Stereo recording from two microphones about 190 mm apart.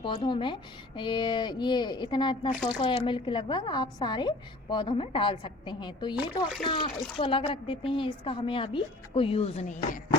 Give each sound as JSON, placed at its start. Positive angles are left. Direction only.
{"t": 0.0, "sound": "a woman's voice", "side_deg": 25}